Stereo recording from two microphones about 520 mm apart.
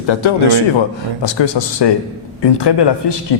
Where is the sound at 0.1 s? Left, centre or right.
Left.